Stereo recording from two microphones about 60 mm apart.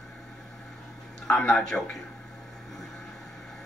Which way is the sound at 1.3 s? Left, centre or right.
Centre.